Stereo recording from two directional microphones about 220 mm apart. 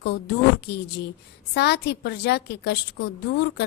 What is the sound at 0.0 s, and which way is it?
A woman's voice, 50° left (ahead or behind).